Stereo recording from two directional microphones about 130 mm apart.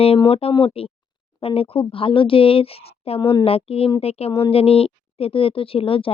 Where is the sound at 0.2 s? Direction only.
50° left (ahead or behind).